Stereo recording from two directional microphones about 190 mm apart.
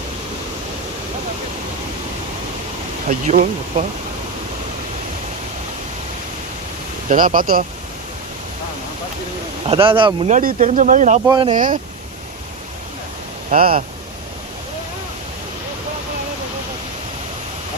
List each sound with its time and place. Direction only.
3.1 s speech: 50° right (ahead or behind)
7.1 s speech: 45° right (ahead or behind)
9.6 s speech: 30° right (ahead or behind)
10.2 s speech: 40° right (ahead or behind)
11.3 s speech: 25° right (ahead or behind)
11.5 s speech: 45° right (ahead or behind)
13.5 s speech: 50° right (ahead or behind)